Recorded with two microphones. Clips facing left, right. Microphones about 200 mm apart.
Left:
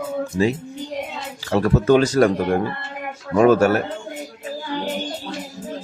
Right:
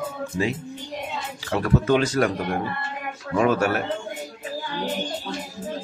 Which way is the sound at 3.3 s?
45° left (ahead or behind).